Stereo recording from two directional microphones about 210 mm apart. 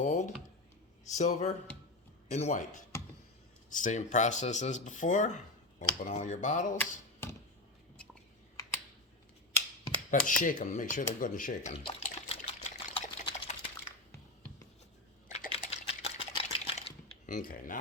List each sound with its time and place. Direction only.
0.0 s a sound: 35° left (ahead or behind)
1.1 s speech: 35° left (ahead or behind)
6.7 s a sound: 10° left (ahead or behind)
10.1 s speech: 40° left (ahead or behind)
11.2 s water: 40° left (ahead or behind)
15.3 s typing: 30° left (ahead or behind)